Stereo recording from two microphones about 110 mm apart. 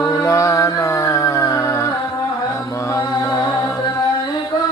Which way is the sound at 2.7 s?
25° left (ahead or behind).